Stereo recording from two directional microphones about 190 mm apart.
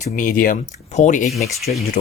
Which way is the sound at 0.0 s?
45° left (ahead or behind).